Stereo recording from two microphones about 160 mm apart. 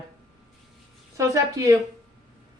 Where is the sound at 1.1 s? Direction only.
20° right (ahead or behind).